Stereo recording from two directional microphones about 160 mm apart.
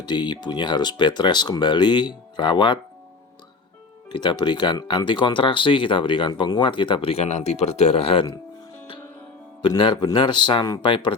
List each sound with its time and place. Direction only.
0.0 s speech: 25° left (ahead or behind)
4.1 s speech: 30° left (ahead or behind)
9.6 s speech: 30° left (ahead or behind)